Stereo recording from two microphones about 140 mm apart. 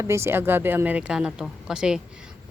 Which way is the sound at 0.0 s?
20° right (ahead or behind).